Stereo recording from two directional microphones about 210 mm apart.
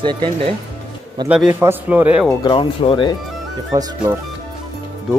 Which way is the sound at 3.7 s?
15° right (ahead or behind).